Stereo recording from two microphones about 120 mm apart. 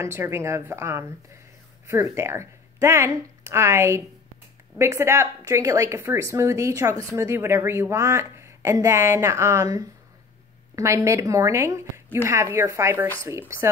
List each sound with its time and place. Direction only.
0.0 s speech: 20° right (ahead or behind)